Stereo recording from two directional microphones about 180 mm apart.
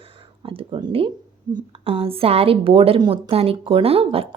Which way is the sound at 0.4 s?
30° right (ahead or behind).